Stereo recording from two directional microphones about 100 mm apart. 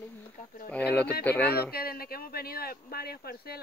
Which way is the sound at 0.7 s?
15° left (ahead or behind).